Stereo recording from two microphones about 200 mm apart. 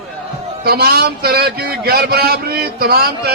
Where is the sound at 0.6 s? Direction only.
50° right (ahead or behind).